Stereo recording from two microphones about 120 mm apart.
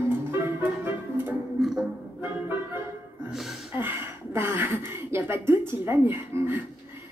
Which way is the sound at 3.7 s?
15° right (ahead or behind).